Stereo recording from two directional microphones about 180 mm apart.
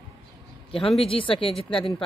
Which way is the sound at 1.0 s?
30° left (ahead or behind).